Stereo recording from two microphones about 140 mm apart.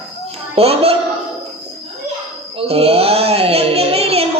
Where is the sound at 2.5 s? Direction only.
45° right (ahead or behind).